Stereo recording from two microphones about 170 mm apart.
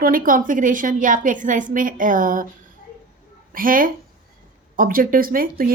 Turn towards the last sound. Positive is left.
turn(degrees=-55)  # may be behind; listen again after turning